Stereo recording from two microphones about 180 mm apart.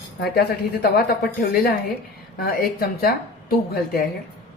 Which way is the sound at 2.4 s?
55° left (ahead or behind).